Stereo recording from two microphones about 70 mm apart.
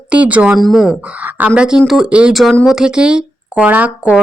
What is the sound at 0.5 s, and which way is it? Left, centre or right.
Speech, centre.